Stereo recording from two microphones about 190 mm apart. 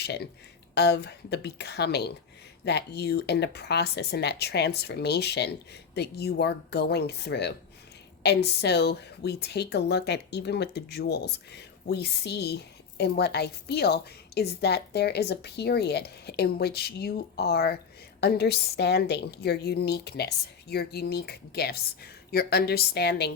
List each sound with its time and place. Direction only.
0.0 s a woman's voice: 60° left (ahead or behind)